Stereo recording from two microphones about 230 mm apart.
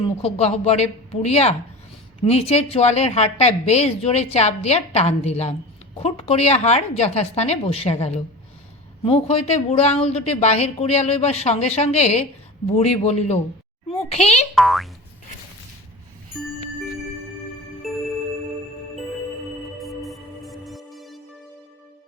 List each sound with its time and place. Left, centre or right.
0.2 s a woman's voice: left
14.5 s boing: centre
19.8 s music: centre